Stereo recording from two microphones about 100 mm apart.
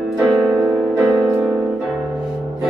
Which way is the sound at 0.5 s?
10° right (ahead or behind).